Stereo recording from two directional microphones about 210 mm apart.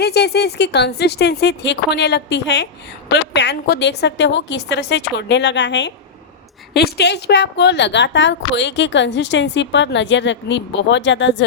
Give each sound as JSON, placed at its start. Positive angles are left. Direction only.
{"t": 0.0, "sound": "a woman's voice", "side_deg": 50}